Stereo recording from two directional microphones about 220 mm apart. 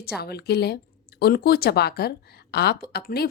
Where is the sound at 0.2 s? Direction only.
45° left (ahead or behind).